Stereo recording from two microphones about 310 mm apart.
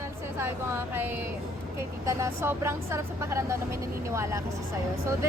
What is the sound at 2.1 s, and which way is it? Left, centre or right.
A woman's voice, centre.